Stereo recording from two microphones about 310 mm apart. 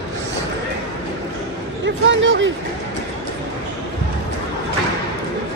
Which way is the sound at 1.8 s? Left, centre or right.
Right.